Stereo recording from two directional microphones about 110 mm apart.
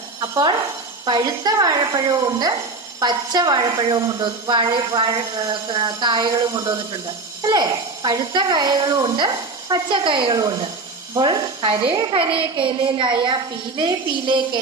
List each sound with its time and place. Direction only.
1.0 s a woman's voice: 40° right (ahead or behind)